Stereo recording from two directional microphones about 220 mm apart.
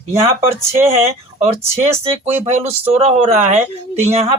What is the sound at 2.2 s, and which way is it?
A woman's voice, 25° right (ahead or behind).